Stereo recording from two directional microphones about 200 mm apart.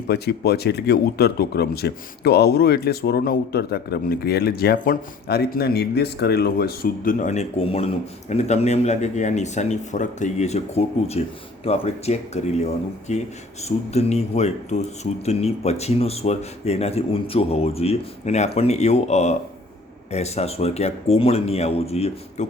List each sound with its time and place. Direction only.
0.1 s speech: 55° left (ahead or behind); by 22.4 s 30° left (ahead or behind)